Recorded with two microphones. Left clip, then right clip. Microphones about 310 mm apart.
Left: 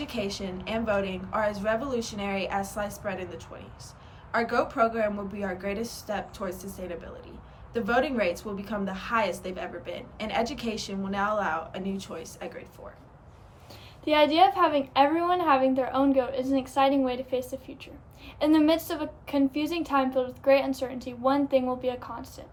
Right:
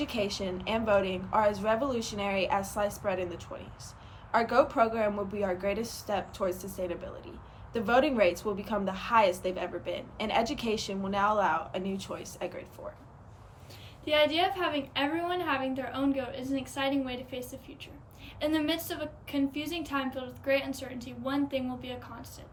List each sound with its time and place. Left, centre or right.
0.0 s a woman's voice: centre
14.0 s a woman's voice: centre